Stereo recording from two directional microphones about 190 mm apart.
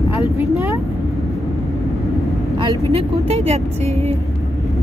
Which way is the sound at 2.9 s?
30° right (ahead or behind).